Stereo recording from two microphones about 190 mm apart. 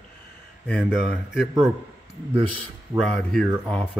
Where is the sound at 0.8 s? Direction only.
5° right (ahead or behind).